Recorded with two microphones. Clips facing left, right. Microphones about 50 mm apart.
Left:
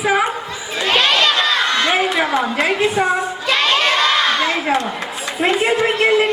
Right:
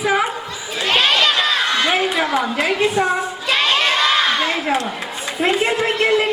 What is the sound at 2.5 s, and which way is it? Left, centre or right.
Speech, left.